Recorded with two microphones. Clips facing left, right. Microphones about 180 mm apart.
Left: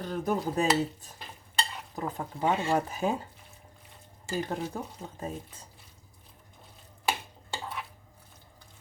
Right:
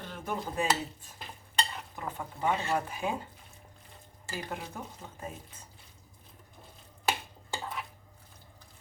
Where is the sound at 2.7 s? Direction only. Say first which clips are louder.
Left 4 dB; 40° left (ahead or behind).